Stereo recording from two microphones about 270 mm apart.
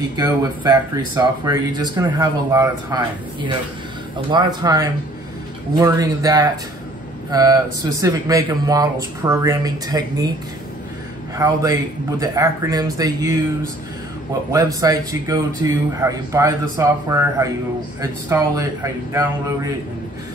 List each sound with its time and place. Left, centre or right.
0.1 s speech: centre
11.3 s speech: centre
14.5 s speech: centre